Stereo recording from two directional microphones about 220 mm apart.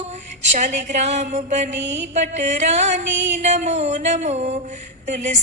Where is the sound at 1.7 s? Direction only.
55° right (ahead or behind).